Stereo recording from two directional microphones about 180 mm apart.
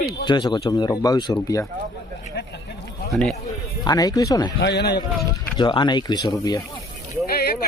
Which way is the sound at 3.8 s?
20° left (ahead or behind).